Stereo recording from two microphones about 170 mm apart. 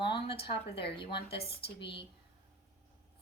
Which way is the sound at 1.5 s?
75° left (ahead or behind).